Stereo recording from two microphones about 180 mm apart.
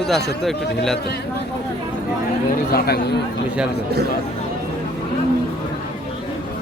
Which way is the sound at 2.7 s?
60° left (ahead or behind).